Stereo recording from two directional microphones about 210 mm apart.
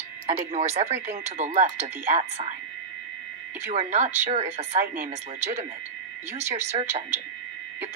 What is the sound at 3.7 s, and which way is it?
Speech, 35° right (ahead or behind).